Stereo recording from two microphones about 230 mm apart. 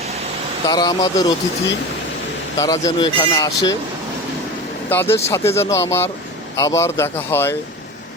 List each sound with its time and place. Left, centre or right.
0.7 s speech: centre
2.6 s speech: centre
4.9 s speech: centre